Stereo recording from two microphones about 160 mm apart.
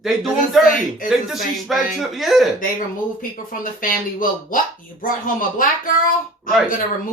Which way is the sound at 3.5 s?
60° left (ahead or behind).